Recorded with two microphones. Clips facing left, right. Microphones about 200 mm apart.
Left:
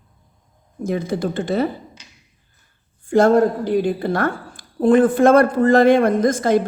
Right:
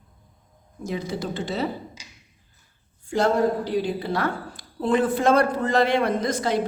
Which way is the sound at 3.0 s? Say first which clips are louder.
Left 7 dB; 50° left (ahead or behind).